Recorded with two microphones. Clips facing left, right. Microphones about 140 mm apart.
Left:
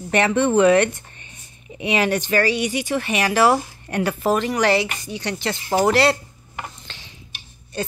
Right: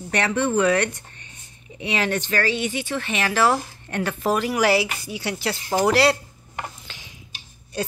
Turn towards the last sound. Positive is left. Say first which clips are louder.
# even
turn(degrees=-5)  # may be behind; listen again after turning